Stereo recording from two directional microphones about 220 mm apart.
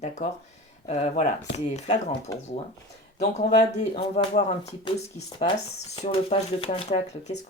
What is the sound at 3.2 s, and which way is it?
Speech, 30° left (ahead or behind).